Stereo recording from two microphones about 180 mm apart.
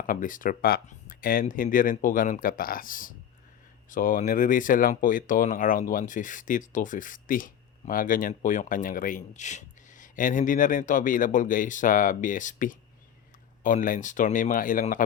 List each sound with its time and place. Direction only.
0.0 s speech: 50° left (ahead or behind)